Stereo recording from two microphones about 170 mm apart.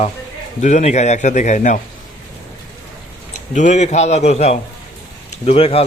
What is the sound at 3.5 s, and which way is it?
A man's voice, 45° left (ahead or behind).